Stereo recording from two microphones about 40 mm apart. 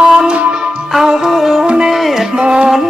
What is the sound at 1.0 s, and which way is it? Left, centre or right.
Music, centre.